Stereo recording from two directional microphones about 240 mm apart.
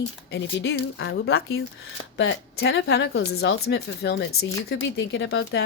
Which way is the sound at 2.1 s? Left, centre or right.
Left.